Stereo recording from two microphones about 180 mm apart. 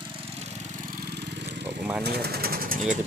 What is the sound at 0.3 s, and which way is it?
Lawn mower, 35° right (ahead or behind).